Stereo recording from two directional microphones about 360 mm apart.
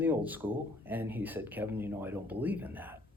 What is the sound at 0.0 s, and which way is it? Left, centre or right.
Speech, centre.